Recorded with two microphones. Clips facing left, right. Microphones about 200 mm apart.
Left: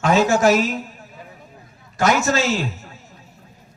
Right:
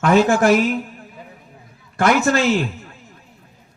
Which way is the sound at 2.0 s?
55° right (ahead or behind).